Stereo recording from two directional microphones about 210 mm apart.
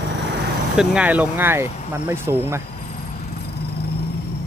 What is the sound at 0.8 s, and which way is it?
Speech, 5° right (ahead or behind).